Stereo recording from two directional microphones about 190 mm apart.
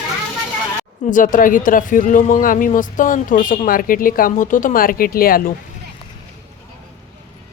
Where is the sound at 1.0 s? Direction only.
45° left (ahead or behind).